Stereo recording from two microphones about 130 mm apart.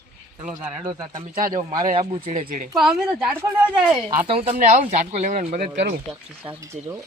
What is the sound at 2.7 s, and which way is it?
Speech, 5° right (ahead or behind).